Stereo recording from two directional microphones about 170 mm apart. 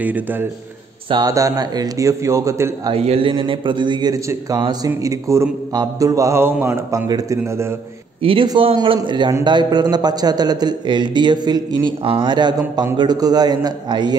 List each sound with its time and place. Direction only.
0.0 s a man's voice: 10° right (ahead or behind)
2.9 s a man's voice: 30° right (ahead or behind)
8.2 s a man's voice: 30° right (ahead or behind)